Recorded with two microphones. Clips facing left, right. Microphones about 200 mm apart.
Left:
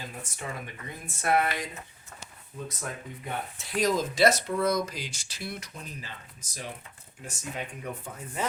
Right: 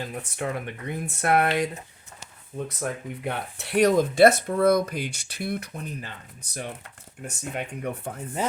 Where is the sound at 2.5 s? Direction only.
60° right (ahead or behind).